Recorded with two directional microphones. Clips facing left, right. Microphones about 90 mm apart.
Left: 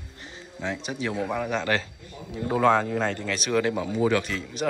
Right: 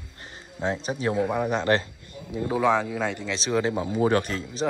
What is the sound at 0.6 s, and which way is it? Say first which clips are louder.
Speech: right 4 dB; 35° right (ahead or behind).